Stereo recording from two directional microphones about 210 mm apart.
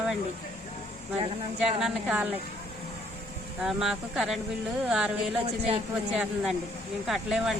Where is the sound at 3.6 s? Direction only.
Centre (ahead or behind).